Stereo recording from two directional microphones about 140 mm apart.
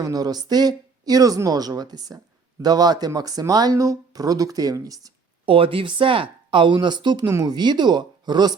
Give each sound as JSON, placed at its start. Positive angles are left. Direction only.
{"t": 0.0, "sound": "speech", "side_deg": -25}
{"t": 5.5, "sound": "speech", "side_deg": -40}